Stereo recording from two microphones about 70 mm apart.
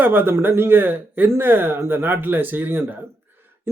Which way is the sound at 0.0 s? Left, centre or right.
Right.